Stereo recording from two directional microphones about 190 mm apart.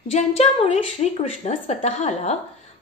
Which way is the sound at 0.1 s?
35° left (ahead or behind).